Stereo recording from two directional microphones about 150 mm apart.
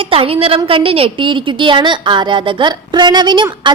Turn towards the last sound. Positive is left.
turn(degrees=-30)  # may be behind; listen again after turning